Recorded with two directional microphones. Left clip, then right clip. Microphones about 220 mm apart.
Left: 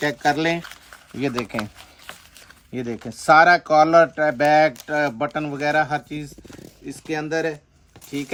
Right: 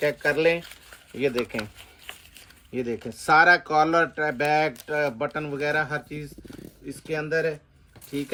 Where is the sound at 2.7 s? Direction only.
50° left (ahead or behind).